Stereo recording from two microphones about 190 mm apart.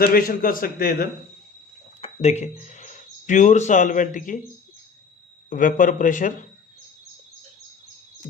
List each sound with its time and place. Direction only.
0.0 s a man's voice: 50° left (ahead or behind)
2.0 s speech: 35° left (ahead or behind)
5.5 s a man's voice: 45° left (ahead or behind)